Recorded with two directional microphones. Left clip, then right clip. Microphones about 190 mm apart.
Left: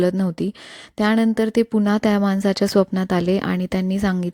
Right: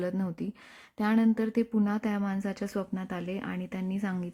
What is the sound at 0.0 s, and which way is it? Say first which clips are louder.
Speech: left 13 dB; 40° left (ahead or behind).